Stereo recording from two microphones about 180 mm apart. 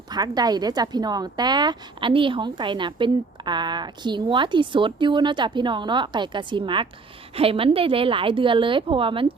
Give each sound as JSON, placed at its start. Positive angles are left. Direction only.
{"t": 0.1, "sound": "a woman's voice", "side_deg": -20}